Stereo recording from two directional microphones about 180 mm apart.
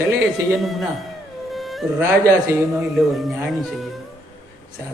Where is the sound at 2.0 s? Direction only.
15° right (ahead or behind).